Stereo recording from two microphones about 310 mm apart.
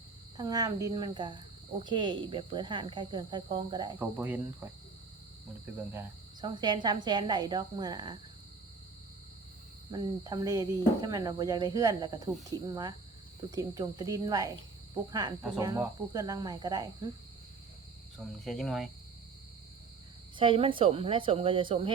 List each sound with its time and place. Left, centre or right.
0.3 s speech: centre
6.4 s speech: centre
9.9 s speech: centre
15.5 s speech: centre
18.4 s speech: centre
20.3 s speech: centre